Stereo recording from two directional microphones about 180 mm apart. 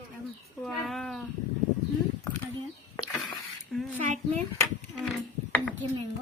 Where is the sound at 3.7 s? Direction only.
5° left (ahead or behind).